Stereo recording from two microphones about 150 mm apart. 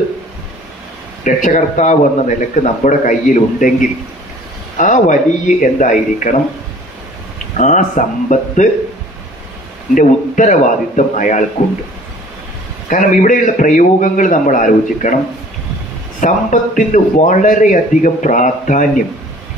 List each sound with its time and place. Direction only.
1.2 s a man's voice: 55° left (ahead or behind)
4.7 s a man's voice: 55° left (ahead or behind)
7.5 s a man's voice: 55° left (ahead or behind)
9.9 s a man's voice: 60° left (ahead or behind)
12.9 s a man's voice: 55° left (ahead or behind)
16.2 s a man's voice: 55° left (ahead or behind)